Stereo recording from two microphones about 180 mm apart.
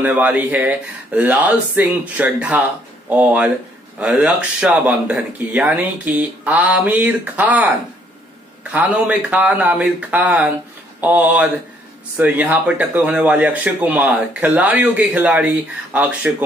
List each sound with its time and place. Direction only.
0.0 s speech: 10° right (ahead or behind)
8.7 s speech: 10° right (ahead or behind)